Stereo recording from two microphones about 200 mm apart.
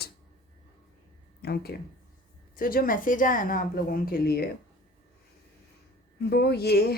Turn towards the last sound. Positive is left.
turn(degrees=50)  # may be behind; listen again after turning